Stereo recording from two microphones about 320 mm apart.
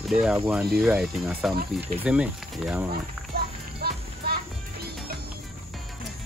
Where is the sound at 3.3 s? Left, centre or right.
Right.